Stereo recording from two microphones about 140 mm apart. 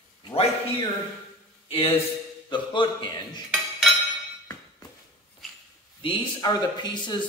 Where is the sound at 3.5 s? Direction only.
5° right (ahead or behind).